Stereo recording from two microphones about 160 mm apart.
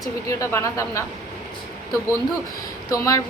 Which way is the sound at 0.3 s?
20° left (ahead or behind).